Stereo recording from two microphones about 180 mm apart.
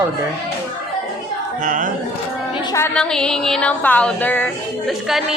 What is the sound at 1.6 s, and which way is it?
Speech, 45° right (ahead or behind).